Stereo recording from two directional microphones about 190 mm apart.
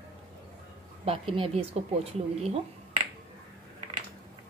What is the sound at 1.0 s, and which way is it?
Speech, 30° right (ahead or behind).